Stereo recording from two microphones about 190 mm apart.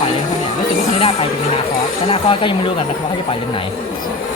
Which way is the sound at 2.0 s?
30° left (ahead or behind).